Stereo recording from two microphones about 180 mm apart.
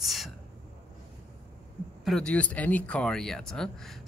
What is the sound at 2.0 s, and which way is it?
Speech, 5° left (ahead or behind).